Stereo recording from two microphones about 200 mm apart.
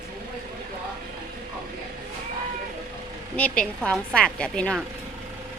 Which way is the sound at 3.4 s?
5° left (ahead or behind).